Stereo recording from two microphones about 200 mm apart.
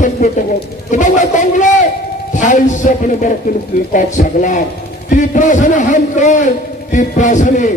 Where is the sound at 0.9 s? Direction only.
40° left (ahead or behind).